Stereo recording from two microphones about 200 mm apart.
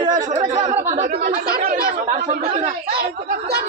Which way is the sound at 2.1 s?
35° right (ahead or behind).